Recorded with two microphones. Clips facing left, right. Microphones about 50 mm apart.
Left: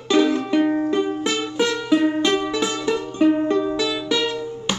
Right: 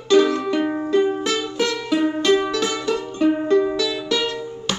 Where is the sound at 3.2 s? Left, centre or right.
Centre.